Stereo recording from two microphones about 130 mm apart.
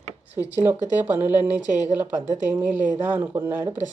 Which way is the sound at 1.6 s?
65° right (ahead or behind).